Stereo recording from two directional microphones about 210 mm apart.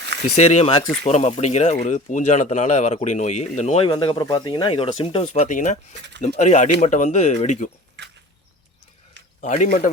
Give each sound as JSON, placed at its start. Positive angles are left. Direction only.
{"t": 0.3, "sound": "speech", "side_deg": 30}
{"t": 1.0, "sound": "speech", "side_deg": 30}
{"t": 3.8, "sound": "speech", "side_deg": 20}
{"t": 9.4, "sound": "speech", "side_deg": 35}